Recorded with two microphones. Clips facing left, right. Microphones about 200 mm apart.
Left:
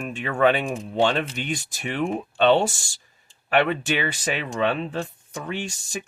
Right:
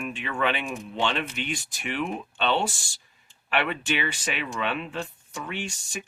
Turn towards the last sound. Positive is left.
turn(degrees=40)  # may be behind; listen again after turning